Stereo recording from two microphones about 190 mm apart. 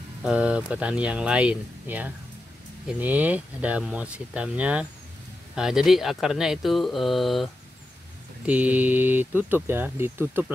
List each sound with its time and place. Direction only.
0.2 s speech: 5° right (ahead or behind)
8.5 s speech: 10° right (ahead or behind)